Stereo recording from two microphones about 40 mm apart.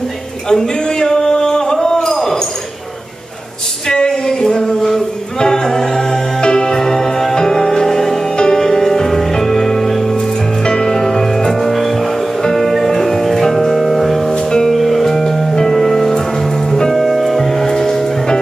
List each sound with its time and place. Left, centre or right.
0.5 s a sound: centre
3.9 s a sound: centre
6.4 s music: centre
10.6 s music: centre
14.3 s music: centre
14.7 s music: centre